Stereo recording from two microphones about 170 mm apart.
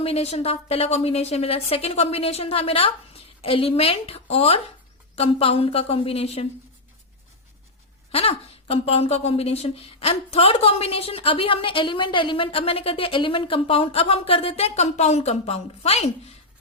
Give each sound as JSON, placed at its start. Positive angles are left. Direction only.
{"t": 0.0, "sound": "a woman's voice", "side_deg": 35}
{"t": 8.1, "sound": "a woman's voice", "side_deg": 35}